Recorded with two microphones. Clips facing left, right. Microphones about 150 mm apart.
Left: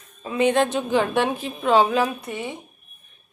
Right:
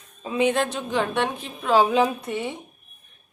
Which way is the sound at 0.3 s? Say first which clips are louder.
Left 1 dB; 15° right (ahead or behind).